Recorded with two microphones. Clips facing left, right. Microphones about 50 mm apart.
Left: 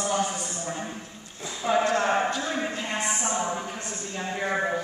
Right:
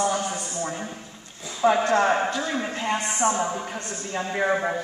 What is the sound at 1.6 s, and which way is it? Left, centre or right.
Speech, right.